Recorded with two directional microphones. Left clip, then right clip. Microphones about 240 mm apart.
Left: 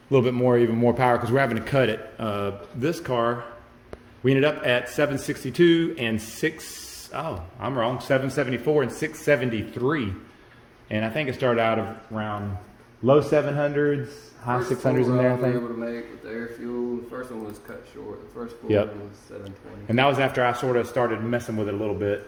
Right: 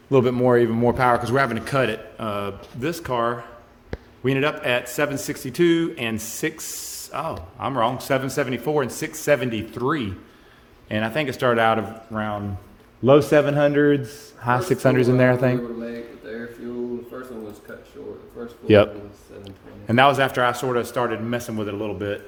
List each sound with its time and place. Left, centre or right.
0.1 s a man's voice: right
13.1 s speech: right
19.5 s a man's voice: right; by 22.2 s centre